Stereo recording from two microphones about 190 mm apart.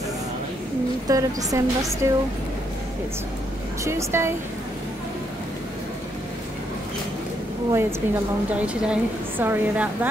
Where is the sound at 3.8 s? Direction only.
15° right (ahead or behind).